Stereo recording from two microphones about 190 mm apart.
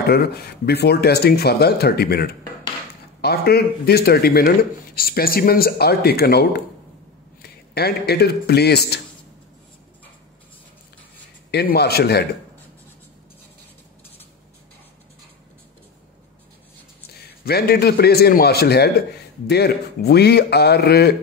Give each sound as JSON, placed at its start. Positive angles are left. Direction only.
{"t": 0.0, "sound": "a man's voice", "side_deg": 55}
{"t": 7.7, "sound": "a man's voice", "side_deg": 55}
{"t": 11.5, "sound": "a man's voice", "side_deg": 60}
{"t": 17.5, "sound": "a man's voice", "side_deg": 55}